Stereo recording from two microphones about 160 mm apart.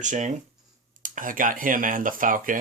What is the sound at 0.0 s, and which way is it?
Speech, 50° right (ahead or behind).